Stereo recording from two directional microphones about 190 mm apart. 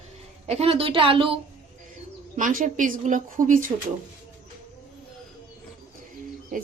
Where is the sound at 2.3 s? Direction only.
45° right (ahead or behind).